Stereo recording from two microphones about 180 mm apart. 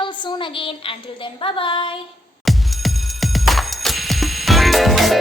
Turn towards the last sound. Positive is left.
turn(degrees=0)  # may be behind; listen again after turning